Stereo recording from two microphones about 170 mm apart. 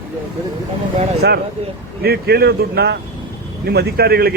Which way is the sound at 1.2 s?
70° right (ahead or behind).